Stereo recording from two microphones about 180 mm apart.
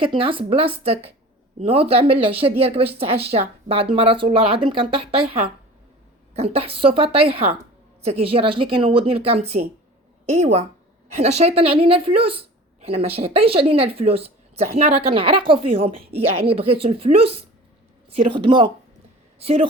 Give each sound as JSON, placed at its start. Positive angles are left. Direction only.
{"t": 0.0, "sound": "speech", "side_deg": -30}
{"t": 6.3, "sound": "a woman's voice", "side_deg": -35}